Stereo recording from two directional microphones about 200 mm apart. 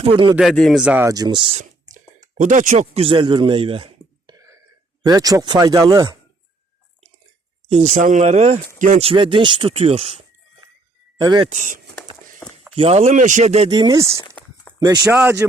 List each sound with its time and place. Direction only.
0.0 s speech: 25° right (ahead or behind)
0.3 s speech: centre (ahead or behind); by 1.5 s 20° right (ahead or behind)
1.5 s whispering: 40° right (ahead or behind)
2.4 s a man's voice: 40° right (ahead or behind)
4.4 s whispering: 15° right (ahead or behind)
5.0 s speech: 20° right (ahead or behind)
7.7 s speech: 35° right (ahead or behind)
11.2 s speech: 20° right (ahead or behind)
11.4 s speech: 35° right (ahead or behind)
13.7 s speech: 20° right (ahead or behind)